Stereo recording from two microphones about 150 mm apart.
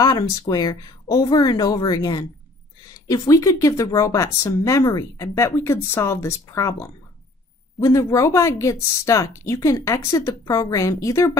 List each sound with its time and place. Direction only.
0.0 s speech: 25° left (ahead or behind)